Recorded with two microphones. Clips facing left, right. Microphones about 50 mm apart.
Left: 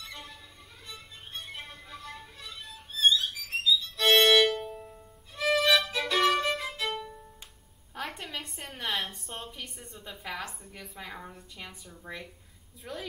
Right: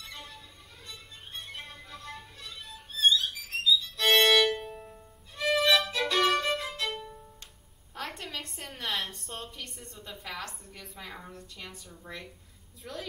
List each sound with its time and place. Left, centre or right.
0.0 s music: centre
4.5 s music: centre
4.9 s violin: centre
7.9 s a sound: centre
11.9 s speech: centre